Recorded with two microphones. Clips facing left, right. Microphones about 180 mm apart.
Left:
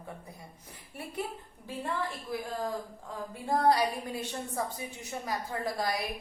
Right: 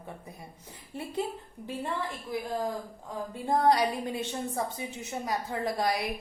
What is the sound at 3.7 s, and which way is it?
A woman's voice, 20° right (ahead or behind).